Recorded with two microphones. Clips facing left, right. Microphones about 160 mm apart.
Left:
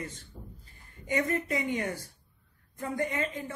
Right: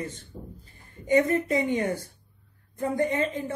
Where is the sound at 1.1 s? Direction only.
30° right (ahead or behind).